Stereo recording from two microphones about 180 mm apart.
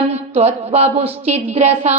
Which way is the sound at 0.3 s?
35° right (ahead or behind).